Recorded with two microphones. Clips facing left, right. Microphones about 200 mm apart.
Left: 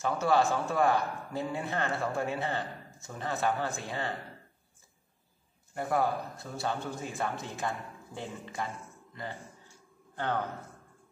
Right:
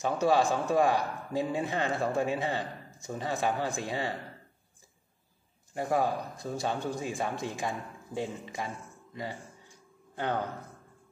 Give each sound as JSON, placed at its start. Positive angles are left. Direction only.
{"t": 0.0, "sound": "a man's voice", "side_deg": -15}
{"t": 5.8, "sound": "a man's voice", "side_deg": -20}